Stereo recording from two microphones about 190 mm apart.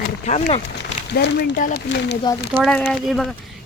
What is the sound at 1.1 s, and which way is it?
Speech, 65° left (ahead or behind).